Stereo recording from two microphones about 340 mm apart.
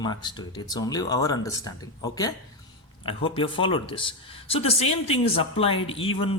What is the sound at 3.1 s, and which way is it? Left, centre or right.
Speech, centre.